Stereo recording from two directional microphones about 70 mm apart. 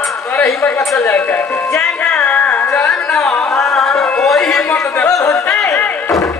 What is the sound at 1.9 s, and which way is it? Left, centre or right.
Music, left.